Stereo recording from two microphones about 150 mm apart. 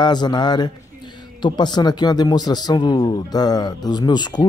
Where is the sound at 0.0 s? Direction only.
30° left (ahead or behind).